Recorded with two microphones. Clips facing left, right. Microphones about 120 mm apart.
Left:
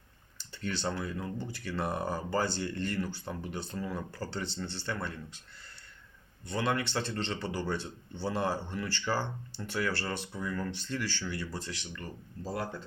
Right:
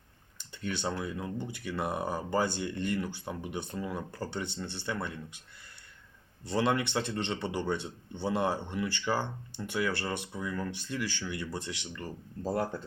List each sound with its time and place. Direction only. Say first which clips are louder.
0.3 s speech: even; 15° right (ahead or behind)
6.4 s speech: right 3 dB; 25° right (ahead or behind)
12.4 s speech: right 5 dB; 50° right (ahead or behind)